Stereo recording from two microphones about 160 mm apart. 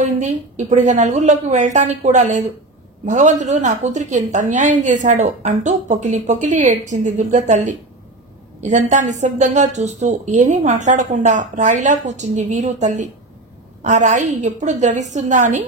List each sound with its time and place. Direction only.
0.0 s a woman's voice: 45° right (ahead or behind)